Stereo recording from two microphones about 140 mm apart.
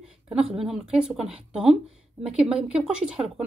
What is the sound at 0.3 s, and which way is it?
A woman's voice, 5° right (ahead or behind).